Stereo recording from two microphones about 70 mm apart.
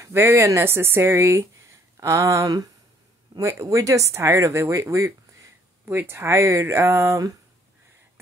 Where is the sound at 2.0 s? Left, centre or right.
Right.